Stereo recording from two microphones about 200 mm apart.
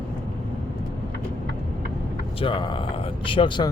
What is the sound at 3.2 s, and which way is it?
Speech, 25° left (ahead or behind).